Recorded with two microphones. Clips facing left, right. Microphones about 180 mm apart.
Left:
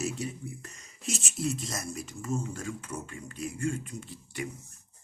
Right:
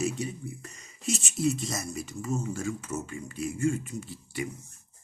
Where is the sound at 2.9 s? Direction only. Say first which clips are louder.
Right 4 dB; 25° right (ahead or behind).